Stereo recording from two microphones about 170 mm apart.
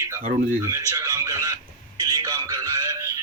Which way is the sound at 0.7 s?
20° right (ahead or behind).